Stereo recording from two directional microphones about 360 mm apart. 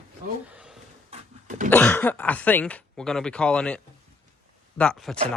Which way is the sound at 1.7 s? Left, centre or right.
Centre.